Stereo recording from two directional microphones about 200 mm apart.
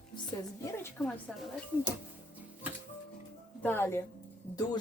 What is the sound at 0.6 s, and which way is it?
Speech, 10° left (ahead or behind).